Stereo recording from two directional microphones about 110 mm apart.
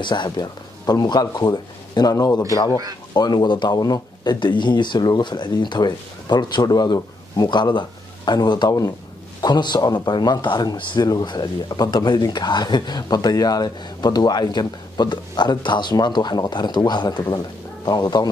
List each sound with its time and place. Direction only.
0.0 s speech: 45° left (ahead or behind)